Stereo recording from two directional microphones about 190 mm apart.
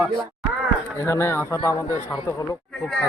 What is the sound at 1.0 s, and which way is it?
Speech, 15° left (ahead or behind).